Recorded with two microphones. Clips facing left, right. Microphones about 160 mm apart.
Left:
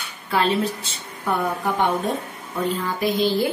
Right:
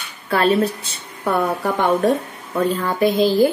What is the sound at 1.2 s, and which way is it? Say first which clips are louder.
Speech: right 4 dB; 80° right.